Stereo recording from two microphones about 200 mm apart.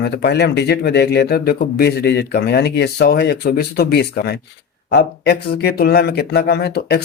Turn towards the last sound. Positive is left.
turn(degrees=55)  # may be behind; listen again after turning